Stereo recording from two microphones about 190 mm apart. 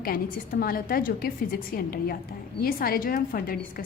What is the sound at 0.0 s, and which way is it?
A woman's voice, 50° left (ahead or behind).